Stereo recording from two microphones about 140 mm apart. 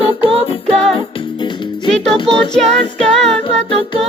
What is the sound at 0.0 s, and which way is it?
Music, 40° left (ahead or behind).